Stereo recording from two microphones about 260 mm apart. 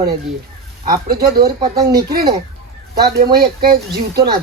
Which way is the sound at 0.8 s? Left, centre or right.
Right.